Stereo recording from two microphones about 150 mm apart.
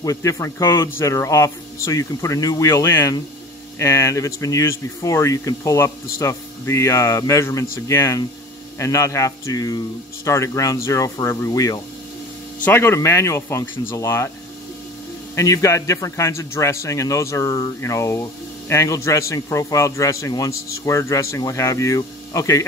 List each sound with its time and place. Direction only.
0.0 s a man's voice: 20° left (ahead or behind)
15.3 s a man's voice: 20° left (ahead or behind)